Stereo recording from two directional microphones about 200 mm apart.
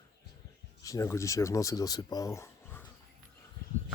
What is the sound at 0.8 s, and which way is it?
Speech, 15° left (ahead or behind).